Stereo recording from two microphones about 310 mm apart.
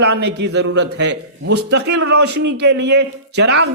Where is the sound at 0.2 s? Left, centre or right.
Right.